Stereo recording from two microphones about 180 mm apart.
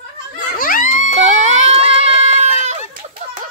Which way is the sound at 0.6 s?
50° left (ahead or behind).